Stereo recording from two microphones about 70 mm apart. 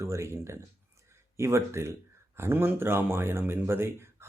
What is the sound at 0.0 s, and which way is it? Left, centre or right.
Speech, right.